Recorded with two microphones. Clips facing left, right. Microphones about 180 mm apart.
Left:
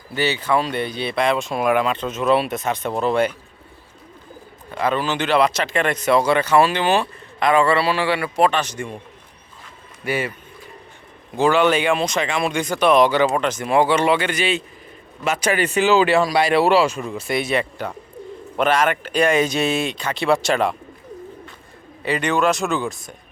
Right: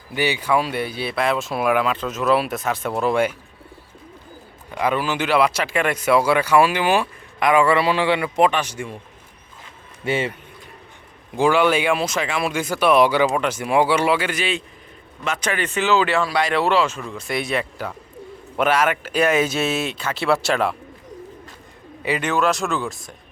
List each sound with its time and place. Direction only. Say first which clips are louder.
0.1 s speech: even; 15° right (ahead or behind)
4.7 s speech: even; 10° right (ahead or behind)
10.0 s speech: right 1 dB; 25° right (ahead or behind)
11.3 s speech: left 1 dB; 10° right (ahead or behind)
22.0 s speech: left 1 dB; 5° right (ahead or behind)